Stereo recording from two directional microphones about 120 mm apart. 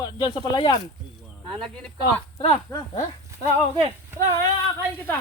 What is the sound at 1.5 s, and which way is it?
Speech, 5° left (ahead or behind).